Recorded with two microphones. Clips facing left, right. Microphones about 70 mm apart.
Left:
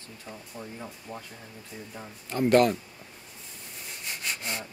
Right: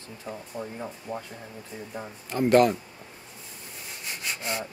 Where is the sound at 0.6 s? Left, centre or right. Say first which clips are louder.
Right 4 dB; centre.